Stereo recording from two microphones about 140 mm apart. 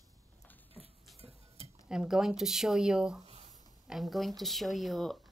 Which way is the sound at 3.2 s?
45° right (ahead or behind).